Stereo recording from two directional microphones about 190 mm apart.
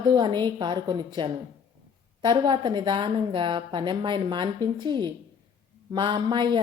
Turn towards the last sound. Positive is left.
turn(degrees=-25)  # may be behind; listen again after turning